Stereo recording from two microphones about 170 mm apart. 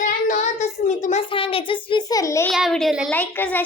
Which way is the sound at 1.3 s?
30° left (ahead or behind).